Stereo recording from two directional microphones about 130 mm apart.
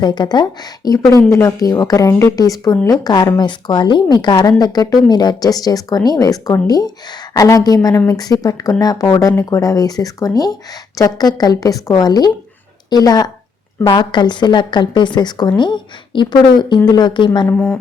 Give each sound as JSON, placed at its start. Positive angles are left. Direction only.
{"t": 0.0, "sound": "a woman's voice", "side_deg": 35}
{"t": 17.5, "sound": "speech", "side_deg": 10}